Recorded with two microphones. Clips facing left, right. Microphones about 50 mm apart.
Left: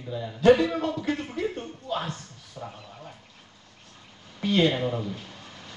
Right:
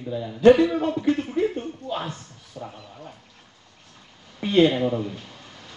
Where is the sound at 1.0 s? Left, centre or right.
Centre.